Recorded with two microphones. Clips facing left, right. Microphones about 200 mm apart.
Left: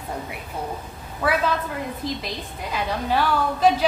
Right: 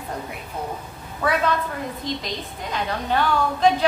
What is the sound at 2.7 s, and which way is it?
A woman's voice, 5° left (ahead or behind).